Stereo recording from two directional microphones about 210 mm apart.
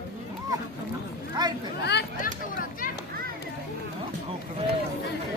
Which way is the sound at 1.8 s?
50° left (ahead or behind).